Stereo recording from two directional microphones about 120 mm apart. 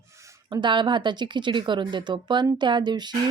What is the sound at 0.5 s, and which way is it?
A woman's voice, 40° right (ahead or behind).